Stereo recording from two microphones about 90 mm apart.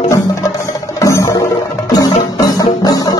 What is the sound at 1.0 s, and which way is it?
Music, 35° left (ahead or behind).